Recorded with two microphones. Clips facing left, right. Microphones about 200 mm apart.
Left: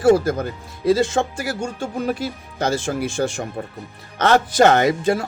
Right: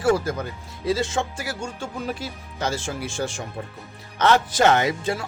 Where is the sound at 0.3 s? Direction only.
50° left (ahead or behind).